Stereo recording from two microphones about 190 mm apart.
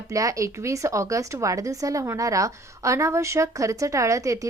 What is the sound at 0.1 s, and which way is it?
Speech, 15° right (ahead or behind).